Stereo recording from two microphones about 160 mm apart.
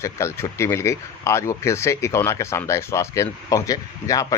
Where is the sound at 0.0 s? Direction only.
15° left (ahead or behind).